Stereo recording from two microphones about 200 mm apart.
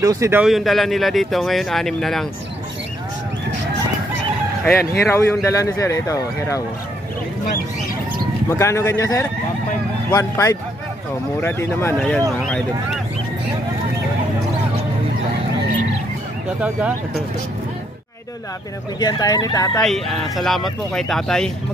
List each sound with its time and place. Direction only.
0.0 s speech: 15° right (ahead or behind); by 2.2 s centre (ahead or behind)
4.6 s speech: 10° left (ahead or behind)
8.5 s speech: 15° left (ahead or behind)
16.6 s speech: 5° right (ahead or behind)
18.9 s speech: 20° left (ahead or behind)
19.8 s speech: centre (ahead or behind)